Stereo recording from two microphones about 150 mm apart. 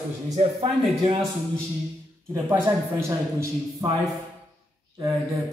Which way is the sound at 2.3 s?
20° right (ahead or behind).